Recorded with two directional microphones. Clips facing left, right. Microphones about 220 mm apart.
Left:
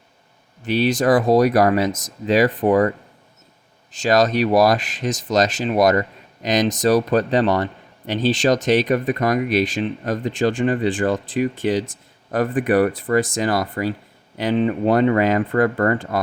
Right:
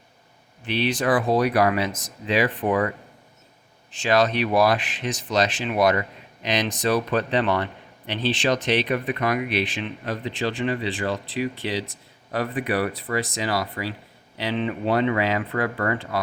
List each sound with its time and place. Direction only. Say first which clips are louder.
0.6 s speech: left 6 dB; 40° left (ahead or behind)
3.9 s speech: left 4 dB; 40° left (ahead or behind)